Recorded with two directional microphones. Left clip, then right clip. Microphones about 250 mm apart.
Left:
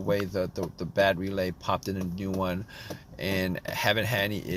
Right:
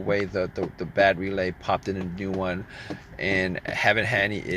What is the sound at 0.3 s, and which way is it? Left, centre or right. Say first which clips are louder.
Speech: right 3 dB; left.